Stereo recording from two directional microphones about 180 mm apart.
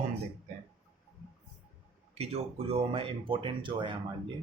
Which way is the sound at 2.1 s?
35° right (ahead or behind).